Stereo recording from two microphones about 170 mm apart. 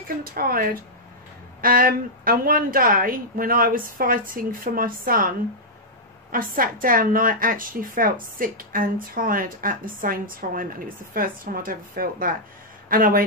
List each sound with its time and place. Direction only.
0.2 s a woman's voice: 60° right (ahead or behind)
6.3 s a woman's voice: 55° right (ahead or behind)